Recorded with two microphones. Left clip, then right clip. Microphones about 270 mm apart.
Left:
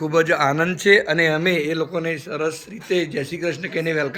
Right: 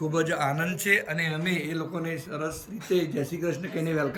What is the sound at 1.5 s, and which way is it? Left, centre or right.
A man's voice, centre.